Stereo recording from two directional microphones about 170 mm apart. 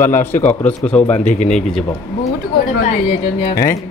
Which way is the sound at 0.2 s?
10° left (ahead or behind).